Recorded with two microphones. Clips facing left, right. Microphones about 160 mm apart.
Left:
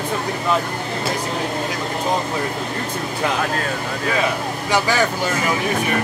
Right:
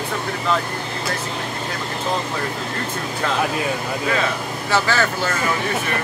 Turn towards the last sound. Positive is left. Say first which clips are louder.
# left 1 dB
turn(degrees=15)  # may be behind; listen again after turning